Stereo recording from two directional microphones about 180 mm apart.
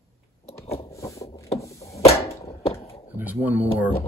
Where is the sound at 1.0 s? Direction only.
15° left (ahead or behind).